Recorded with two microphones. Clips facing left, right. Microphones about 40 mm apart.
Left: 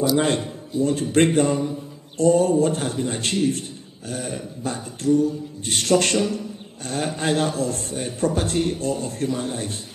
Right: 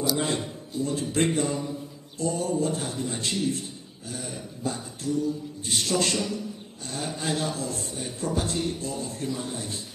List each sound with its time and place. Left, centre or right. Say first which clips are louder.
0.1 s a man's voice: left 7 dB; left